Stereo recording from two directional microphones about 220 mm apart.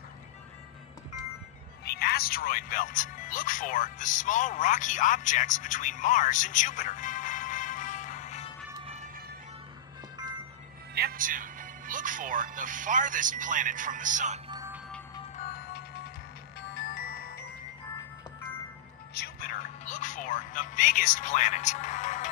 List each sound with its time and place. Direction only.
1.9 s speech: 45° left (ahead or behind)
11.0 s music: 40° right (ahead or behind)
14.5 s music: 15° right (ahead or behind)
15.3 s music: 40° left (ahead or behind)
16.7 s glockenspiel: 45° left (ahead or behind)
19.1 s music: 40° left (ahead or behind)